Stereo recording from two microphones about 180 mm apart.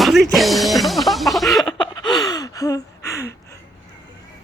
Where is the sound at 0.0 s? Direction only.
Centre (ahead or behind).